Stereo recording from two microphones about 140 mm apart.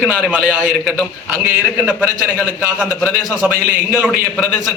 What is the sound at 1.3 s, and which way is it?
Speech, 15° right (ahead or behind).